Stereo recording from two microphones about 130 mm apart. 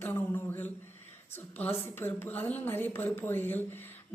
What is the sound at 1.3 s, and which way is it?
Speech, 15° left (ahead or behind).